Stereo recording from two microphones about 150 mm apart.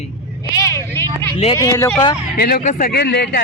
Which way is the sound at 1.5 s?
20° left (ahead or behind).